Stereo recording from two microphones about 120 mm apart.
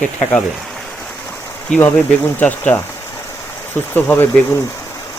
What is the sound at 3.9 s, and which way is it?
Speech, 15° left (ahead or behind).